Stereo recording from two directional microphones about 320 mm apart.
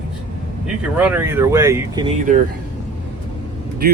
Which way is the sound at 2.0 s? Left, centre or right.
Right.